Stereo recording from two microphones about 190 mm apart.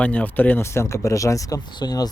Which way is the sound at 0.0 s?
10° left (ahead or behind).